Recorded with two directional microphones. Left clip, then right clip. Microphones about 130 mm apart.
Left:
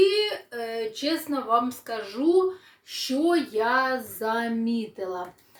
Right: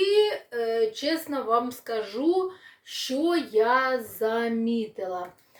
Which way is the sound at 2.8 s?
20° right (ahead or behind).